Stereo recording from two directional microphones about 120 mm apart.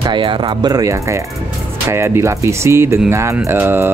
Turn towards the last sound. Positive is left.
turn(degrees=-20)  # may be behind; listen again after turning